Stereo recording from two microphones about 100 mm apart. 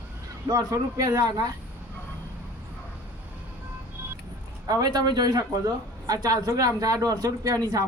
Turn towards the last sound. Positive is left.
turn(degrees=-35)  # may be behind; listen again after turning